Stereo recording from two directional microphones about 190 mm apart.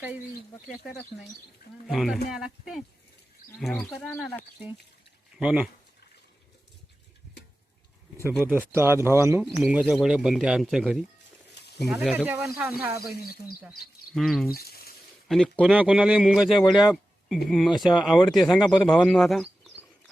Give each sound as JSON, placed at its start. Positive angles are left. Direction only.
{"t": 1.9, "sound": "a man's voice", "side_deg": 0}
{"t": 5.4, "sound": "a man's voice", "side_deg": -5}
{"t": 8.4, "sound": "speech", "side_deg": -10}
{"t": 9.4, "sound": "a man's voice", "side_deg": 0}
{"t": 13.0, "sound": "speech", "side_deg": 55}
{"t": 13.6, "sound": "a man's voice", "side_deg": -5}
{"t": 14.5, "sound": "a sound", "side_deg": 55}
{"t": 15.3, "sound": "a man's voice", "side_deg": 5}